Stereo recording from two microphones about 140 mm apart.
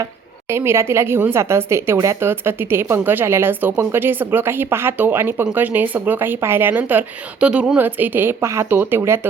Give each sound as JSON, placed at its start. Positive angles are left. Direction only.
{"t": 0.5, "sound": "a woman's voice", "side_deg": -20}